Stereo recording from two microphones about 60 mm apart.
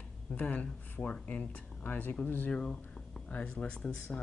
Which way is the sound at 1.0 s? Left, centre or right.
Left.